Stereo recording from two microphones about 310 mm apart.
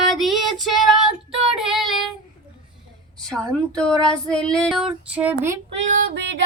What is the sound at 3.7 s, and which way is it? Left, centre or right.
Child singing, centre.